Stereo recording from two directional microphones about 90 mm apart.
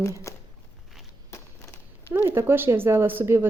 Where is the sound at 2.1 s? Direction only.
25° right (ahead or behind).